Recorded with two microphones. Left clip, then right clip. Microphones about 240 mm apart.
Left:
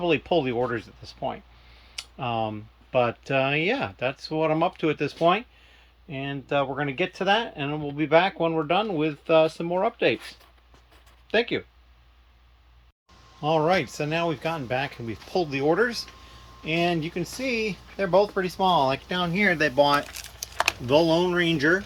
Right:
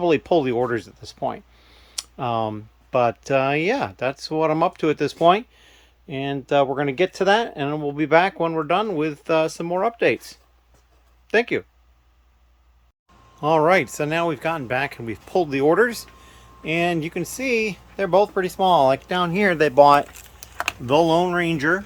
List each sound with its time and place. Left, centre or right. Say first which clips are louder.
0.0 s speech: right 4 dB; right
11.3 s speech: right 4 dB; right
13.4 s speech: right 5 dB; centre